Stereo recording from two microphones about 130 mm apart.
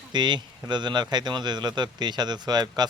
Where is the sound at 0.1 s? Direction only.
35° right (ahead or behind).